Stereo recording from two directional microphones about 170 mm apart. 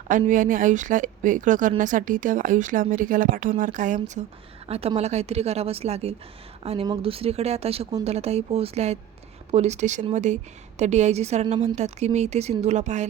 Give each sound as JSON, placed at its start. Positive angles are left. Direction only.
{"t": 0.1, "sound": "speech", "side_deg": -50}
{"t": 4.7, "sound": "a woman's voice", "side_deg": -35}